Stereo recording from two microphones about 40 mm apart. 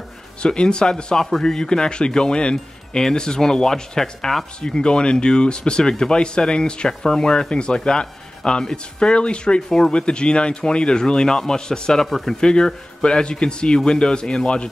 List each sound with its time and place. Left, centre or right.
0.4 s speech: left
4.6 s speech: left